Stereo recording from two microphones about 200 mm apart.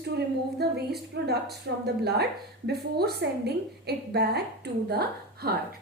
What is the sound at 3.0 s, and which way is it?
A woman's voice, 55° right (ahead or behind).